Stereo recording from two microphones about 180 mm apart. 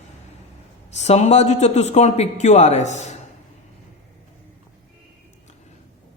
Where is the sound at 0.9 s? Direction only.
40° left (ahead or behind).